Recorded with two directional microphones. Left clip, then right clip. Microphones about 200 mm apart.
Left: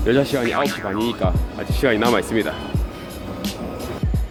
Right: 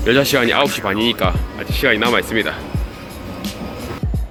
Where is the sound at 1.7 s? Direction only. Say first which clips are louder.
Right 3 dB; 20° left (ahead or behind).